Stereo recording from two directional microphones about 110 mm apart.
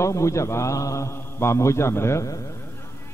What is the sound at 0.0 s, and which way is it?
A man's voice, 25° left (ahead or behind).